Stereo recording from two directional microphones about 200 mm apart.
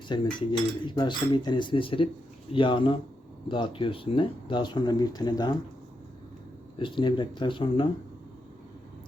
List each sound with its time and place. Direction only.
0.1 s speech: 25° left (ahead or behind)
6.7 s speech: 25° left (ahead or behind)